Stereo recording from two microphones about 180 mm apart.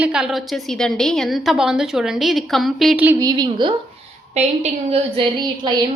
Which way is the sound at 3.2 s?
20° right (ahead or behind).